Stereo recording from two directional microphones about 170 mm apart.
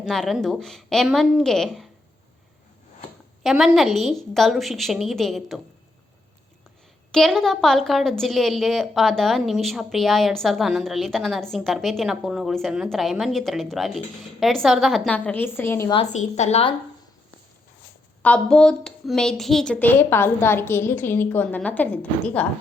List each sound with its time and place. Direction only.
0.0 s a woman's voice: centre (ahead or behind)
3.4 s a woman's voice: centre (ahead or behind)
7.1 s a woman's voice: 5° left (ahead or behind)
16.1 s a woman's voice: 40° left (ahead or behind)
18.2 s a woman's voice: 5° left (ahead or behind)